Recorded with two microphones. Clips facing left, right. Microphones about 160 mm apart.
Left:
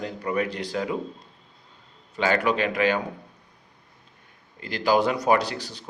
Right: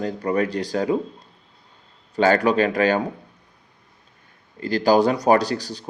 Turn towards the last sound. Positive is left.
turn(degrees=-35)  # may be behind; listen again after turning